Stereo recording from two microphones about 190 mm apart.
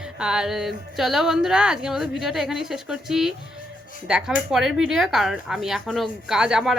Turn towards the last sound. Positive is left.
turn(degrees=0)  # may be behind; listen again after turning